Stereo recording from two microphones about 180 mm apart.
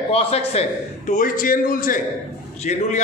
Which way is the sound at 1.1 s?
50° left (ahead or behind).